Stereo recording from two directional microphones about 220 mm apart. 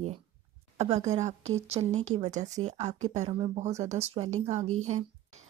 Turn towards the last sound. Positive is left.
turn(degrees=-30)  # may be behind; listen again after turning